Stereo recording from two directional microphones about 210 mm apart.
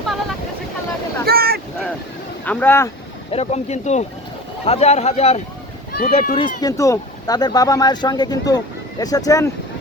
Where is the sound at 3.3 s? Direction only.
30° left (ahead or behind).